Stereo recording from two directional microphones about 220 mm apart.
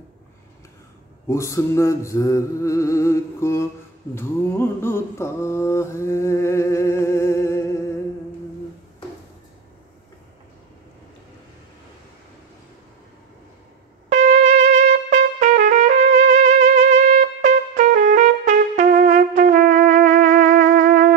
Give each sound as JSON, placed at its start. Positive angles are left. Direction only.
{"t": 1.3, "sound": "mantra", "side_deg": 15}
{"t": 14.0, "sound": "trumpet", "side_deg": -35}